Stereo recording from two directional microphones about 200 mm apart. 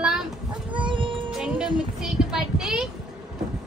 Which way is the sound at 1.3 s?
5° right (ahead or behind).